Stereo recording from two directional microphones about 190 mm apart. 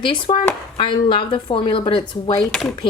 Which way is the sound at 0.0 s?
25° left (ahead or behind).